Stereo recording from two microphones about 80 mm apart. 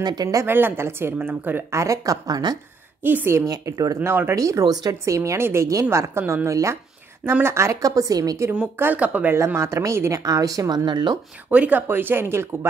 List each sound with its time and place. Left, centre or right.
0.0 s speech: right
0.5 s a woman's voice: right
1.8 s a woman's voice: right
3.0 s a woman's voice: right
3.4 s a woman's voice: right
4.0 s a woman's voice: right
4.4 s a woman's voice: right
8.9 s a woman's voice: centre
9.3 s a woman's voice: right
10.2 s a woman's voice: right
10.9 s speech: right
11.5 s a woman's voice: centre